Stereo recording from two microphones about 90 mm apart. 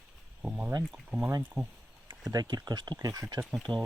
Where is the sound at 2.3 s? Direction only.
45° right (ahead or behind).